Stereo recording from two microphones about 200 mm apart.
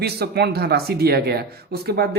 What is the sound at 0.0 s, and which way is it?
Speech, 55° right (ahead or behind).